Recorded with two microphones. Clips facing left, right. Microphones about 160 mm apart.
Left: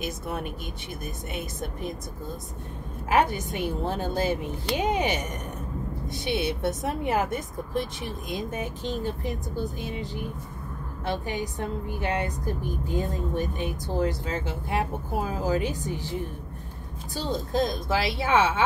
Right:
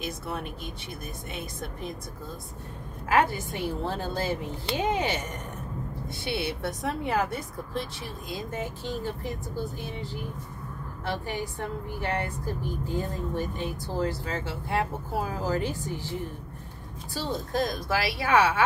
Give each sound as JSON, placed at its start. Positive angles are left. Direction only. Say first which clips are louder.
{"t": 3.1, "sound": "a woman's voice", "louder": "left 1 dB", "side_deg": 20}
{"t": 11.1, "sound": "a woman's voice", "louder": "left 2 dB", "side_deg": 15}
{"t": 17.1, "sound": "a woman's voice", "louder": "left 2 dB", "side_deg": 20}